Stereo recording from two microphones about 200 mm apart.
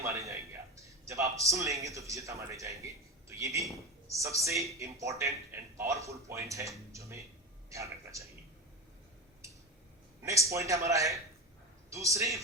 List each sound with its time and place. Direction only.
0.0 s a man's voice: 15° right (ahead or behind)
10.2 s a man's voice: 15° right (ahead or behind)